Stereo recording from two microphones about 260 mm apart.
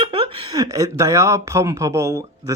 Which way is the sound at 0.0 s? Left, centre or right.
Centre.